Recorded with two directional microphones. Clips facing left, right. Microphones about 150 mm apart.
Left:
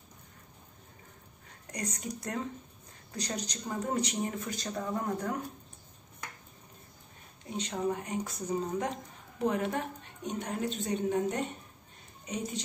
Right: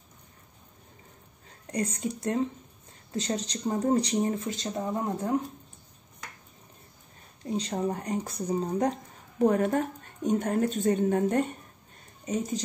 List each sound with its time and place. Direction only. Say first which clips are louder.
1.7 s speech: right 7 dB; 30° right (ahead or behind)
7.4 s speech: right 3 dB; 35° right (ahead or behind)
9.4 s a woman's voice: right 7 dB; 45° right (ahead or behind)
12.3 s speech: right 6 dB; 40° right (ahead or behind)